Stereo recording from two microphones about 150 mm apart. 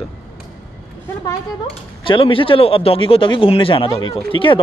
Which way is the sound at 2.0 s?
35° left (ahead or behind).